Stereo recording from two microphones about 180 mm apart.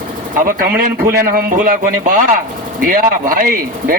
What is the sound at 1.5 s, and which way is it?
Speech, 50° right (ahead or behind).